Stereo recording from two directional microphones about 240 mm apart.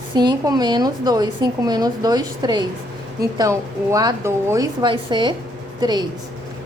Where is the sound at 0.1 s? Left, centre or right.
Centre.